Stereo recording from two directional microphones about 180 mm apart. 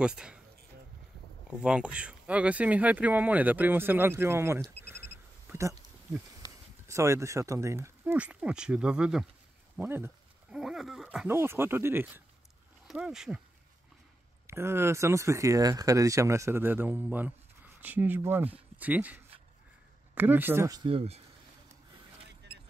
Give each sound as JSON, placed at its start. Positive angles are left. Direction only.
{"t": 0.0, "sound": "speech", "side_deg": -5}
{"t": 1.6, "sound": "speech", "side_deg": -5}
{"t": 6.9, "sound": "speech", "side_deg": -15}
{"t": 9.8, "sound": "a sound", "side_deg": -10}
{"t": 11.2, "sound": "speech", "side_deg": -15}
{"t": 14.5, "sound": "speech", "side_deg": -15}
{"t": 20.9, "sound": "speech", "side_deg": -35}